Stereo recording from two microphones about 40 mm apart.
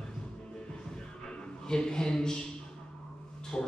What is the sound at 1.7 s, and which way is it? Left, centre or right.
Speech, centre.